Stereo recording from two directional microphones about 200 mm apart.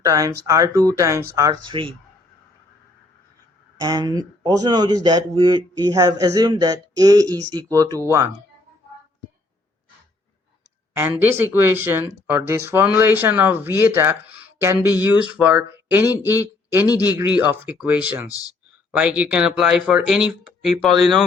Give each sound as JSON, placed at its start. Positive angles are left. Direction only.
{"t": 0.0, "sound": "a man's voice", "side_deg": -15}
{"t": 3.8, "sound": "a man's voice", "side_deg": -20}
{"t": 10.9, "sound": "speech", "side_deg": -10}
{"t": 18.3, "sound": "speech", "side_deg": 15}
{"t": 18.9, "sound": "speech", "side_deg": -5}